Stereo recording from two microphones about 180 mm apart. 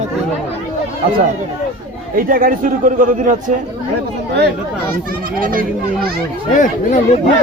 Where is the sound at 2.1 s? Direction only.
50° right (ahead or behind).